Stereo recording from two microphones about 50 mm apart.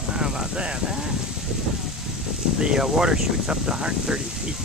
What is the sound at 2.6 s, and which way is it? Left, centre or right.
Speech, centre.